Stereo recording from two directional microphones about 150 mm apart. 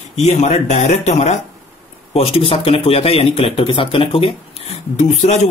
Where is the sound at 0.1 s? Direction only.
45° left (ahead or behind).